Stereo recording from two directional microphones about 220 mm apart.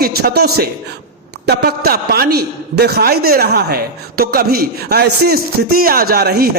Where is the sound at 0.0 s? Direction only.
45° right (ahead or behind).